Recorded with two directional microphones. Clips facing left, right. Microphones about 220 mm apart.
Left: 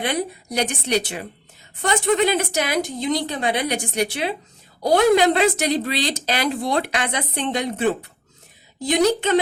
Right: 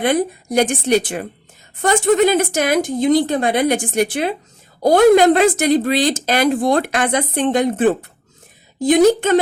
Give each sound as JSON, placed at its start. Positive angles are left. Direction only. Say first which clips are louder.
{"t": 0.0, "sound": "speech", "louder": "right 7 dB", "side_deg": -50}